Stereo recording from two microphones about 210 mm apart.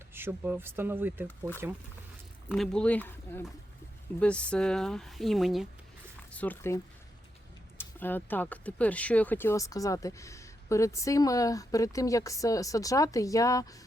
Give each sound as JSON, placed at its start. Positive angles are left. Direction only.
{"t": 0.1, "sound": "speech", "side_deg": -10}
{"t": 2.5, "sound": "speech", "side_deg": 5}
{"t": 7.8, "sound": "speech", "side_deg": 10}